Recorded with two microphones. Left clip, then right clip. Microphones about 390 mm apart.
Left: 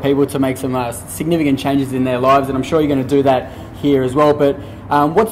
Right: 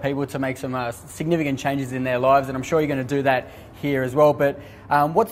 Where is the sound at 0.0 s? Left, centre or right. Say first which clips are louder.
Left 9 dB; right.